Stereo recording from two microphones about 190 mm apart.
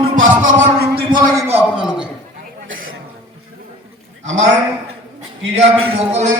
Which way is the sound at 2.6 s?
90° right.